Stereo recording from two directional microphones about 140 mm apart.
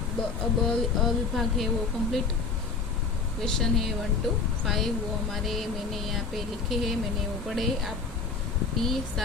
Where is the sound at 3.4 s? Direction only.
Centre (ahead or behind).